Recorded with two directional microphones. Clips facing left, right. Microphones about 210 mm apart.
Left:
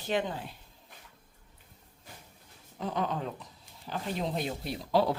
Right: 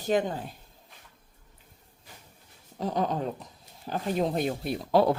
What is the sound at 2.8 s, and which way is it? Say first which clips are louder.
Speech: right 4 dB; 40° right (ahead or behind).